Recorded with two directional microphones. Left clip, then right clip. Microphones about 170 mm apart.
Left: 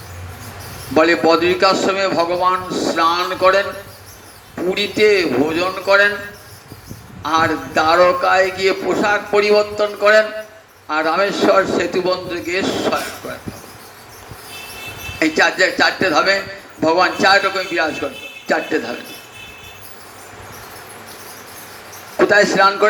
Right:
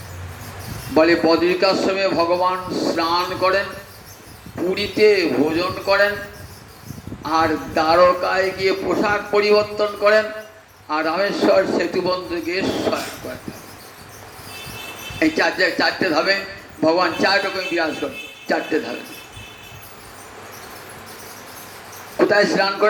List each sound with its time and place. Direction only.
0.9 s a man's voice: 35° left (ahead or behind)
7.3 s a man's voice: 35° left (ahead or behind)
15.2 s a man's voice: 35° left (ahead or behind)
22.2 s a man's voice: 35° left (ahead or behind)